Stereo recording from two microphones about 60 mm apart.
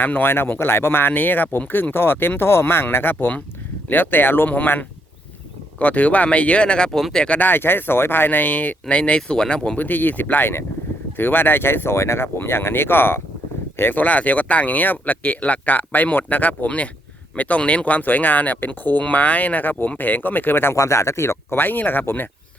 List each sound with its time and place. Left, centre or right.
0.0 s speech: left; by 7.3 s centre
7.3 s speech: left; by 9.7 s centre
9.7 s speech: left
20.7 s speech: left